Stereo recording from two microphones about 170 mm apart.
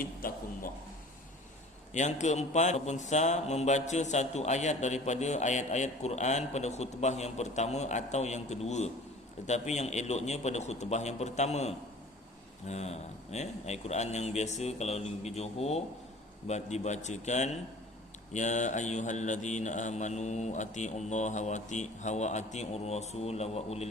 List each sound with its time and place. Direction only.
0.0 s a man's voice: 55° left (ahead or behind)
1.9 s a man's voice: 45° left (ahead or behind)
16.5 s mantra: 40° left (ahead or behind)